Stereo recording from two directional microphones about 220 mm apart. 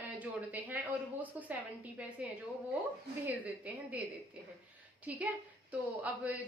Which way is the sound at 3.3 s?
5° right (ahead or behind).